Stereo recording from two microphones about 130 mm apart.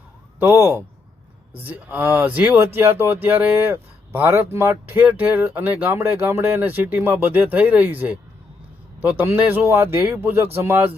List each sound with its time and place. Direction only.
0.3 s speech: 20° right (ahead or behind)